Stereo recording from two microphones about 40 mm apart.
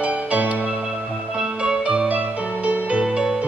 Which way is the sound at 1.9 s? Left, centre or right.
Right.